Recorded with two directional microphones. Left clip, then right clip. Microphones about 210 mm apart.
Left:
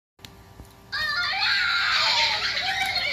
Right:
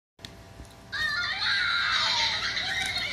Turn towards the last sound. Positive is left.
turn(degrees=30)  # may be behind; listen again after turning